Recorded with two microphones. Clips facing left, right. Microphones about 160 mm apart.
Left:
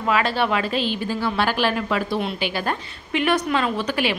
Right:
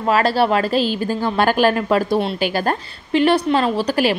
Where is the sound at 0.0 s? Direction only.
40° right (ahead or behind).